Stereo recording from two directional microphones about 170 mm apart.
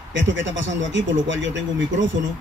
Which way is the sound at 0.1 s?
90° right.